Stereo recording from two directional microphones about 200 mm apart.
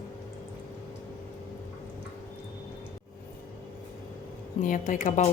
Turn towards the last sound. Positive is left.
turn(degrees=35)  # may be behind; listen again after turning